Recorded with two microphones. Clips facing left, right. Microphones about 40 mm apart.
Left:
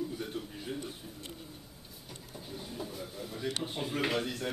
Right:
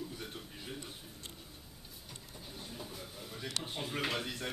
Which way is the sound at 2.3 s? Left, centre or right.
Centre.